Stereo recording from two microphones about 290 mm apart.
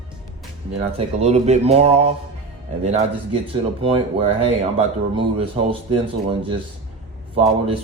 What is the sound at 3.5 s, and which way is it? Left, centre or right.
Speech, centre.